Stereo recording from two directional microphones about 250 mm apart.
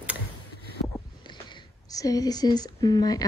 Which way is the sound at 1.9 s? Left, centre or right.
Centre.